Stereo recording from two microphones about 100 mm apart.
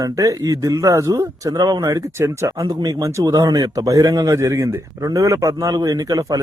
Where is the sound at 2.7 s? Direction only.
40° right (ahead or behind).